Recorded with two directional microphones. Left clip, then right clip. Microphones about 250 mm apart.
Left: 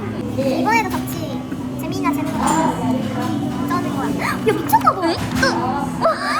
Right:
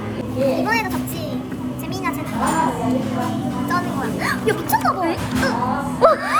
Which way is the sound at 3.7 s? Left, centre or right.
Centre.